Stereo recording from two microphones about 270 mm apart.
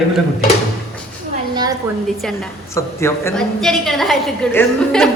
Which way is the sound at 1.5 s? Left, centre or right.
Centre.